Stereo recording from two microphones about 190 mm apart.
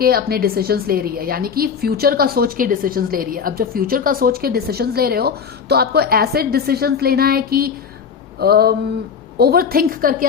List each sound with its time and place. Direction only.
0.0 s a woman's voice: 50° right (ahead or behind)
8.4 s a sound: 55° right (ahead or behind)
9.4 s a woman's voice: 55° right (ahead or behind)